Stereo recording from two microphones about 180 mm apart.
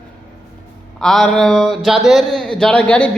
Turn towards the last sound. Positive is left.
turn(degrees=5)  # may be behind; listen again after turning